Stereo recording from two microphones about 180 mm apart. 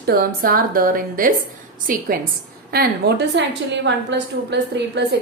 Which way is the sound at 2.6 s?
65° right (ahead or behind).